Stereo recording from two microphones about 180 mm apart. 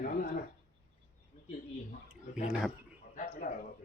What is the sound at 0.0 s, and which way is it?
Speech, 50° left (ahead or behind).